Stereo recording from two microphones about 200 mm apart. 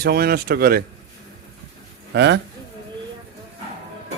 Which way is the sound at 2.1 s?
60° right (ahead or behind).